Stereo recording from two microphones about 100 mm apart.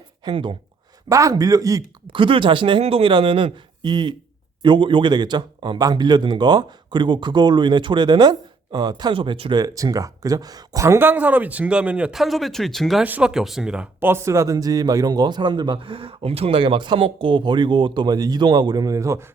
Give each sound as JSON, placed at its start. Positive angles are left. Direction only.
{"t": 0.3, "sound": "speech", "side_deg": -55}
{"t": 1.0, "sound": "speech", "side_deg": -35}
{"t": 2.1, "sound": "speech", "side_deg": -55}
{"t": 2.8, "sound": "speech", "side_deg": -65}
{"t": 12.1, "sound": "speech", "side_deg": 0}
{"t": 13.0, "sound": "speech", "side_deg": -10}
{"t": 14.0, "sound": "speech", "side_deg": -25}